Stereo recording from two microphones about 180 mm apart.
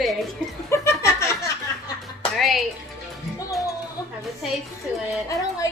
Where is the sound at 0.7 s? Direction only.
15° left (ahead or behind).